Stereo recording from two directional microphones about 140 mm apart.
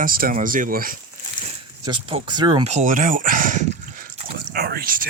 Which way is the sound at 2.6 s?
60° right (ahead or behind).